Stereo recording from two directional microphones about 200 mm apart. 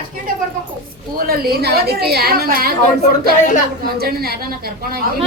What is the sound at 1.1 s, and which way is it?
A woman's voice, 50° right (ahead or behind).